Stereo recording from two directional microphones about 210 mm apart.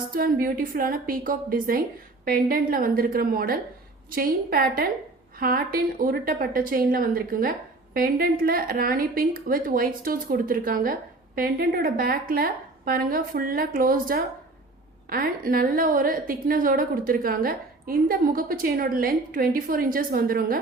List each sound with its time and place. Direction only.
0.1 s a woman's voice: 45° right (ahead or behind)